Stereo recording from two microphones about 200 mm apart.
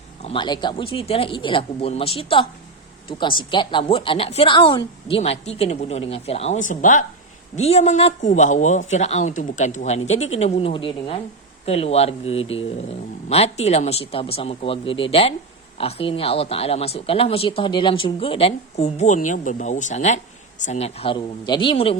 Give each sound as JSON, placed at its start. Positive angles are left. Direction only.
{"t": 0.2, "sound": "speech", "side_deg": 25}